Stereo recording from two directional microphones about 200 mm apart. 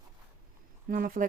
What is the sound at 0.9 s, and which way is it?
Speech, 45° right (ahead or behind).